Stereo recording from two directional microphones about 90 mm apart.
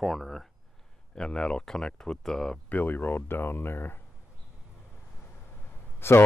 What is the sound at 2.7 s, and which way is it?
Speech, 20° left (ahead or behind).